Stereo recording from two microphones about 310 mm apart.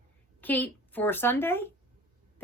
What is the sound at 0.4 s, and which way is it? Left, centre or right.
Speech, centre.